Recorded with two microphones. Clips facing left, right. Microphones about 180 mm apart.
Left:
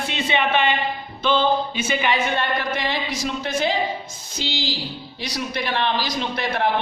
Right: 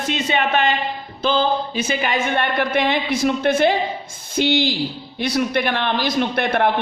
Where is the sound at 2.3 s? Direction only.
60° right (ahead or behind).